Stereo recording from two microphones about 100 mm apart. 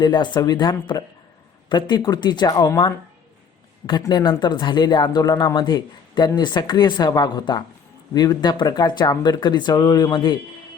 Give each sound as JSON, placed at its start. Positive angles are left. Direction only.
{"t": 0.0, "sound": "speech", "side_deg": 50}
{"t": 4.1, "sound": "speech", "side_deg": 45}